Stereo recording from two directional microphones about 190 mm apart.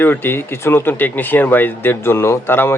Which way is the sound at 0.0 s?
10° left (ahead or behind).